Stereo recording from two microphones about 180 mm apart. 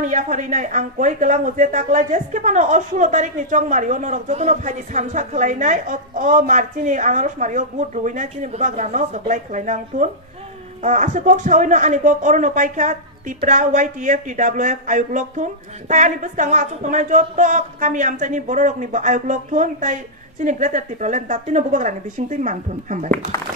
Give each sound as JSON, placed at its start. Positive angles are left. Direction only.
{"t": 0.0, "sound": "speech", "side_deg": -45}
{"t": 23.3, "sound": "speech", "side_deg": 20}